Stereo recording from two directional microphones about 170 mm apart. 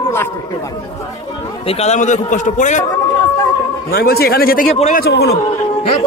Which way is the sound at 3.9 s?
65° left (ahead or behind).